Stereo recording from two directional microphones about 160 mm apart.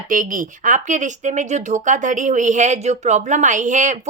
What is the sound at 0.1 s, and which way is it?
Speech, 55° right (ahead or behind).